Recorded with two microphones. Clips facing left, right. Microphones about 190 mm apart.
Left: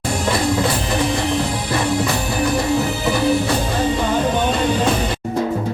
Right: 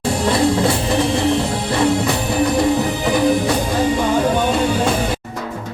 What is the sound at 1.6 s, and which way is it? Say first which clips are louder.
Music: right 3 dB; 25° right (ahead or behind).